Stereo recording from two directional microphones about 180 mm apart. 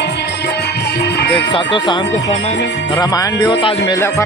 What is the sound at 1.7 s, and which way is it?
Speech, 25° left (ahead or behind).